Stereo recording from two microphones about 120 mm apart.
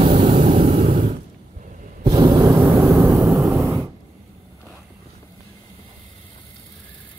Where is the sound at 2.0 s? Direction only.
30° right (ahead or behind).